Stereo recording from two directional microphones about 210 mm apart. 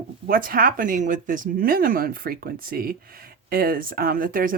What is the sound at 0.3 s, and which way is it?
Speech, 45° right (ahead or behind).